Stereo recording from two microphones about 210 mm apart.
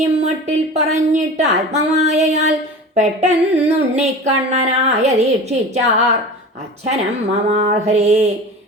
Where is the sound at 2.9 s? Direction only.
35° right (ahead or behind).